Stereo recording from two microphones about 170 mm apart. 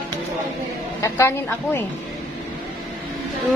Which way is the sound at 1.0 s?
15° left (ahead or behind).